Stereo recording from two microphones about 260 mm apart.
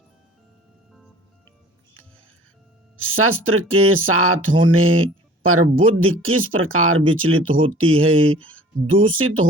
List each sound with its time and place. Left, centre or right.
3.1 s speech: right